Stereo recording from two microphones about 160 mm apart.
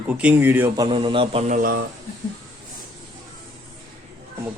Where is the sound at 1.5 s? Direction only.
50° right (ahead or behind).